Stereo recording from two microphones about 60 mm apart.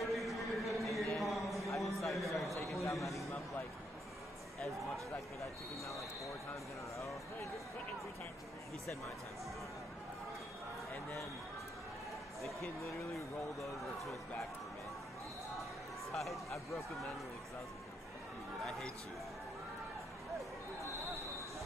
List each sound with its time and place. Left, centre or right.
0.1 s a sound: centre
6.2 s speech: left
13.1 s speech: centre
16.1 s speech: centre